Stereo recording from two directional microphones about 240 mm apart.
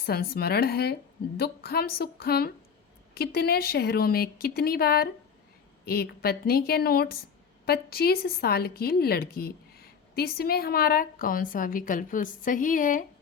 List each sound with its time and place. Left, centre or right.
0.0 s a woman's voice: left